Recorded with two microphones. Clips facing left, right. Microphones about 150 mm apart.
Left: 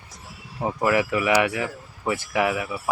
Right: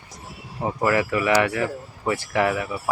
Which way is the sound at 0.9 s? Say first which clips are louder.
Right 1 dB; 15° left (ahead or behind).